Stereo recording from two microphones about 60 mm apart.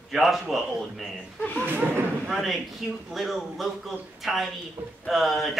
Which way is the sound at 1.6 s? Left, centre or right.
Right.